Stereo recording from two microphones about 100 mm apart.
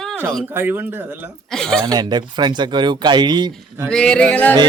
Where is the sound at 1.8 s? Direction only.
45° right (ahead or behind).